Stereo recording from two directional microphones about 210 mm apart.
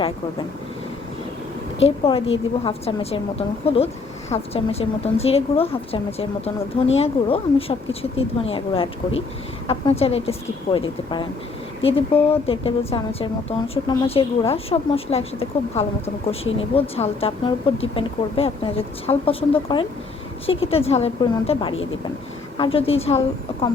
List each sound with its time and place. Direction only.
1.8 s speech: 25° left (ahead or behind)